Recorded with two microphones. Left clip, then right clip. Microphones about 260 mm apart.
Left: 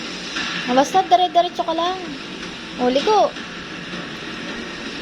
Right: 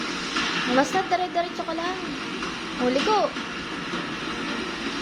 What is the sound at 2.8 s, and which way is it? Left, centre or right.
Speech, centre.